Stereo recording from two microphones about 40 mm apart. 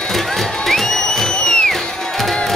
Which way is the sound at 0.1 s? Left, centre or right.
Centre.